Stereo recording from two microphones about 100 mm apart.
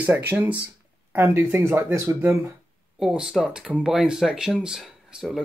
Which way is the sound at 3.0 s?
5° right (ahead or behind).